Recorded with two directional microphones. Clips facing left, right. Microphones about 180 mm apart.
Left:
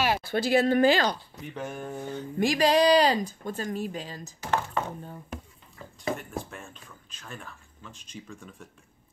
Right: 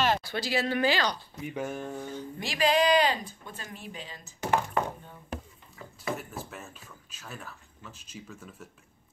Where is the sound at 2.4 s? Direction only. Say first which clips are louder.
Left 4 dB; 40° left (ahead or behind).